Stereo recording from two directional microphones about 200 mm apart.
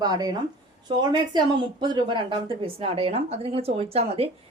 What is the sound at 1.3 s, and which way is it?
A woman's voice, 20° right (ahead or behind).